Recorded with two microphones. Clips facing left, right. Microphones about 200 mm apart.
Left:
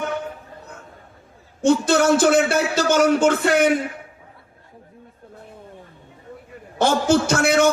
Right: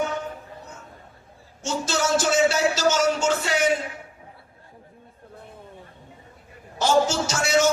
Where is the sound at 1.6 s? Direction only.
55° left (ahead or behind).